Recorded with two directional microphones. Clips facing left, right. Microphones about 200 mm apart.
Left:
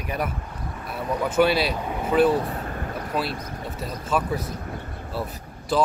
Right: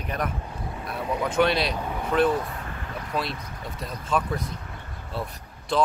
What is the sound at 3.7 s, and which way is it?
Speech, 5° left (ahead or behind).